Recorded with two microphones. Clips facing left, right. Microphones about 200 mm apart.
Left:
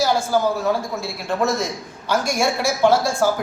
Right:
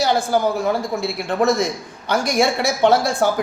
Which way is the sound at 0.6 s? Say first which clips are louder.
Right 2 dB; 15° right (ahead or behind).